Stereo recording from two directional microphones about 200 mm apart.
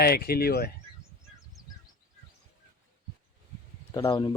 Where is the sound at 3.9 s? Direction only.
20° left (ahead or behind).